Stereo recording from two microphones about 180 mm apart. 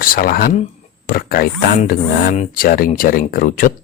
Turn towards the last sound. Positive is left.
turn(degrees=50)  # may be behind; listen again after turning